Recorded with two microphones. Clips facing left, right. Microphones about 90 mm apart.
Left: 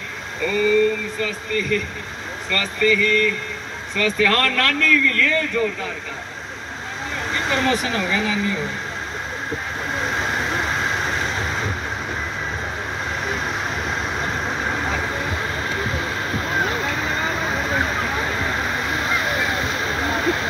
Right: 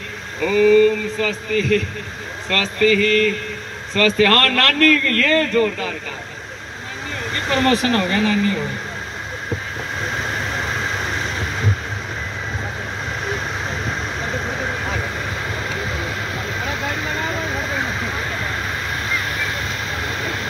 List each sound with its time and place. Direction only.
0.4 s a man's voice: 80° right
7.5 s speech: 65° right (ahead or behind)